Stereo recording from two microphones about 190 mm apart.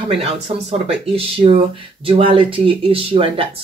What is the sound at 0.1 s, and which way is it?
Speech, 30° right (ahead or behind).